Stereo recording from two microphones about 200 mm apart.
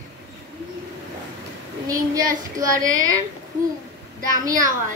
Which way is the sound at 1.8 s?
15° right (ahead or behind).